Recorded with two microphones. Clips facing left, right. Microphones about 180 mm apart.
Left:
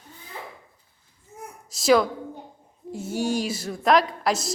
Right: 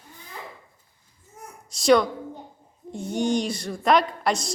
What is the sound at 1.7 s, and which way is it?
A woman's voice, centre (ahead or behind).